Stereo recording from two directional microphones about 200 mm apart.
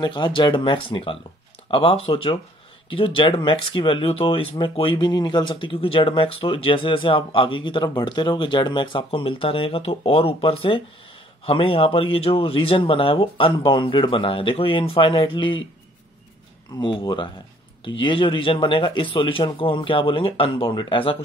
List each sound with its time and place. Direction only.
0.0 s speech: 20° left (ahead or behind)
16.8 s speech: 25° left (ahead or behind)